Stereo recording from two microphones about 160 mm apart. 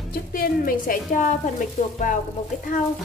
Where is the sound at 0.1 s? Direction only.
65° left (ahead or behind).